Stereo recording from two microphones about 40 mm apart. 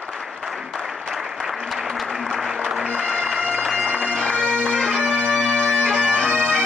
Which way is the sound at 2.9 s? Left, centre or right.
Left.